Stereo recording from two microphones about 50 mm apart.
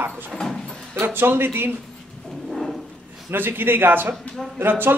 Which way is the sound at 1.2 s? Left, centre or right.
Right.